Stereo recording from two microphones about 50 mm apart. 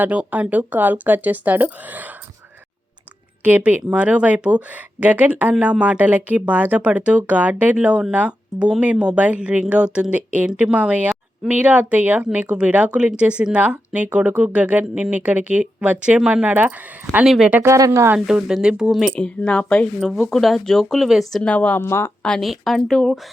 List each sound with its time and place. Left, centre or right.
0.0 s speech: right
3.4 s speech: right
17.7 s speech: right
18.3 s speech: centre
19.1 s speech: left
20.0 s speech: centre
20.3 s speech: centre
21.4 s speech: left
21.8 s speech: left
22.4 s speech: centre